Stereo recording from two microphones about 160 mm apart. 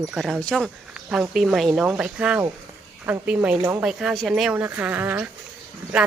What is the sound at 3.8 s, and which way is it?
A woman's voice, centre (ahead or behind).